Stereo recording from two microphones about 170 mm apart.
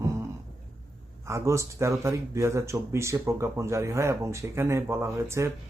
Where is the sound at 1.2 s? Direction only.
15° right (ahead or behind).